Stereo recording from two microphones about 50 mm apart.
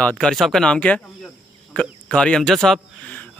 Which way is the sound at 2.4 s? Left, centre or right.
Centre.